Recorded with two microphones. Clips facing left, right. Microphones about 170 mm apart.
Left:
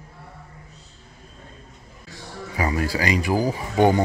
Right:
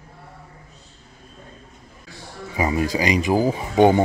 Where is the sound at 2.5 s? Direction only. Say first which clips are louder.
Right 3 dB; 20° right (ahead or behind).